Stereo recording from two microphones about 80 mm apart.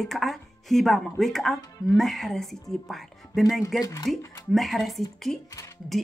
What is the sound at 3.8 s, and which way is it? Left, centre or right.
Speech, left.